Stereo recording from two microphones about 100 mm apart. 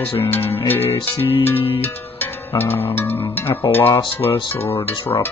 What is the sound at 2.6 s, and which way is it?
Music, 25° left (ahead or behind).